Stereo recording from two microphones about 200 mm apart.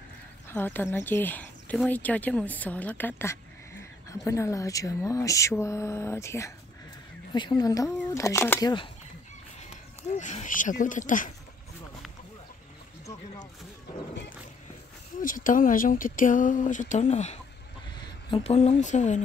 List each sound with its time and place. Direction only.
0.5 s speech: 10° left (ahead or behind)
10.1 s speech: 35° left (ahead or behind)
15.1 s speech: 40° left (ahead or behind)